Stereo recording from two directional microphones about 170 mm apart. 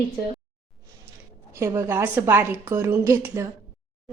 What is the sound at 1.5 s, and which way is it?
A woman's voice, 20° right (ahead or behind).